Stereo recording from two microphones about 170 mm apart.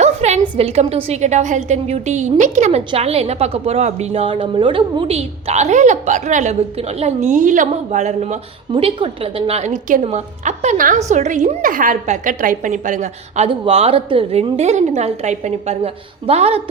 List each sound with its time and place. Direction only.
0.0 s a woman's voice: 40° right (ahead or behind)
8.7 s a woman's voice: 30° right (ahead or behind)